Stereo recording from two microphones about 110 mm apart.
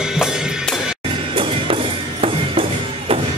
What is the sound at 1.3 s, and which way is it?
Music, 55° right (ahead or behind).